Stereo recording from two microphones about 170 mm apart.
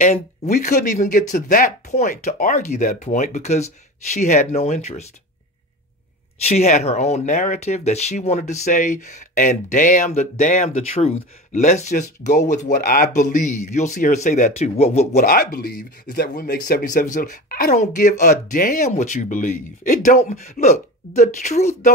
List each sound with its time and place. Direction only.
0.5 s speech: 50° left (ahead or behind)
6.4 s speech: 40° left (ahead or behind)
15.2 s speech: 55° left (ahead or behind)
20.5 s speech: 40° left (ahead or behind)